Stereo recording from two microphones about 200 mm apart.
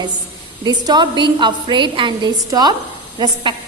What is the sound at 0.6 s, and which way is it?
A woman's voice, 20° right (ahead or behind).